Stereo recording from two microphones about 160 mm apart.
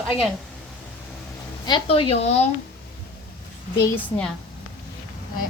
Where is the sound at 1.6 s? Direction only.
30° left (ahead or behind).